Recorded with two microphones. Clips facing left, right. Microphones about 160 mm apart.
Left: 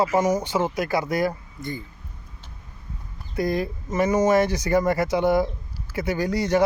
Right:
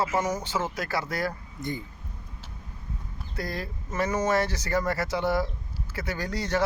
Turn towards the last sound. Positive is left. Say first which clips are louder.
# left 7 dB
turn(degrees=10)  # may be behind; listen again after turning